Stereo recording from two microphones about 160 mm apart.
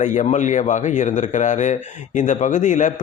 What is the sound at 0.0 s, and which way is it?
A man's voice, 50° left (ahead or behind).